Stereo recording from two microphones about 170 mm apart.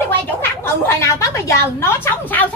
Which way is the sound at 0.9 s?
15° left (ahead or behind).